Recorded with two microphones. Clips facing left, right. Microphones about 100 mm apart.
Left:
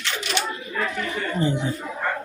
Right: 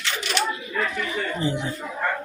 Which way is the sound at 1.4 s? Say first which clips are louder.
Left 5 dB; 35° left (ahead or behind).